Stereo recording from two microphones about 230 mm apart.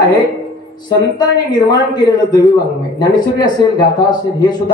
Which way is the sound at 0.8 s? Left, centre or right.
Centre.